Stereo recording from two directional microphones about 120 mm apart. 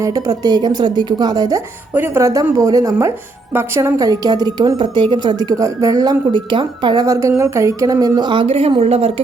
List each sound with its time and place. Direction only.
0.0 s a woman's voice: 25° right (ahead or behind)
1.9 s a woman's voice: 15° right (ahead or behind); by 9.2 s 50° right (ahead or behind)